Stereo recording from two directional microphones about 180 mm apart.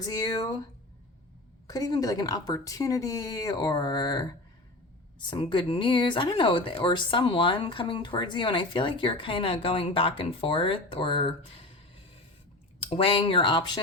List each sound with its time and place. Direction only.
0.0 s speech: 20° left (ahead or behind)
1.6 s speech: 20° left (ahead or behind)
12.8 s speech: 30° left (ahead or behind)